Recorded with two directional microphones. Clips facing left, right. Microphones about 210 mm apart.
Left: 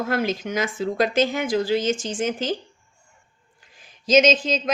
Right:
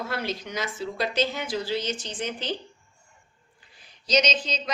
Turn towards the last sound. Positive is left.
turn(degrees=50)  # may be behind; listen again after turning